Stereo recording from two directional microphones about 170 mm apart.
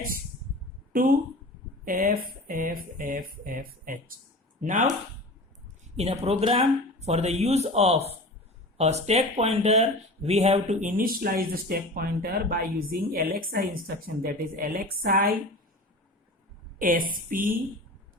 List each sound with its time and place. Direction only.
1.8 s speech: 55° right (ahead or behind)
6.0 s speech: 40° right (ahead or behind); by 15.4 s 55° right (ahead or behind)
16.7 s a woman's voice: 55° right (ahead or behind)